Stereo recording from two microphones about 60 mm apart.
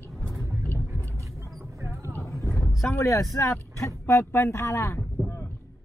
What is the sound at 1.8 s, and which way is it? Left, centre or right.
Clip-clop, right.